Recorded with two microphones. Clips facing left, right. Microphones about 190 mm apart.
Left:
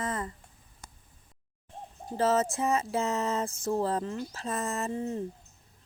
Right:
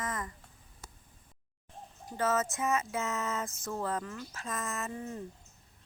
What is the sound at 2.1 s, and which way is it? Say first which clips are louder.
Speech: left 5 dB; 30° left (ahead or behind).